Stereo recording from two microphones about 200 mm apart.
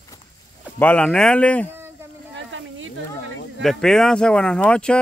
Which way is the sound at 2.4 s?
70° right (ahead or behind).